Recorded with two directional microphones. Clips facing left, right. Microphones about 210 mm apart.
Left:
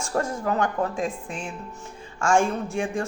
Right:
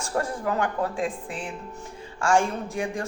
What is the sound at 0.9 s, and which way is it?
Speech, 30° right (ahead or behind).